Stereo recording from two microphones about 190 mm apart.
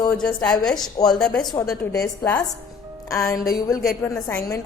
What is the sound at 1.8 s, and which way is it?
Speech, 20° left (ahead or behind).